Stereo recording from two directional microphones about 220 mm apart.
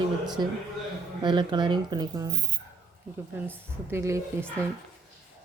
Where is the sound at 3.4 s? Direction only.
10° right (ahead or behind).